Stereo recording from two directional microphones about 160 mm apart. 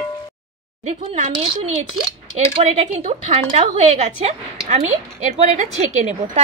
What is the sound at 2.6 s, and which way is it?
A woman's voice, 40° right (ahead or behind).